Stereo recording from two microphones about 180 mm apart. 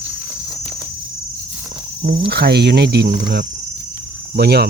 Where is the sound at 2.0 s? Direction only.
60° right (ahead or behind).